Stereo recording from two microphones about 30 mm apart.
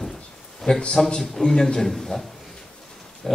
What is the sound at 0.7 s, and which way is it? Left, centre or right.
Speech, left.